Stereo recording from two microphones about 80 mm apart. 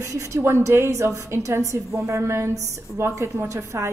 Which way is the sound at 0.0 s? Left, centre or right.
Right.